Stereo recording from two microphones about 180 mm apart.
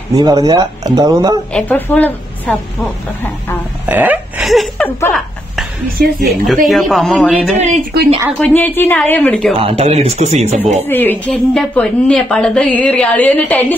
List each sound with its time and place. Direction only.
0.1 s speech: 20° right (ahead or behind)
1.5 s a woman's voice: 10° left (ahead or behind)
3.8 s a sound: 10° right (ahead or behind)
4.8 s a woman's voice: 10° left (ahead or behind)
6.2 s a man's voice: centre (ahead or behind)
9.6 s speech: 30° right (ahead or behind)
10.9 s a woman's voice: 10° left (ahead or behind)